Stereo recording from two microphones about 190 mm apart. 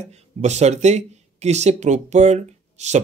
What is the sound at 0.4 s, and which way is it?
Speech, 35° right (ahead or behind).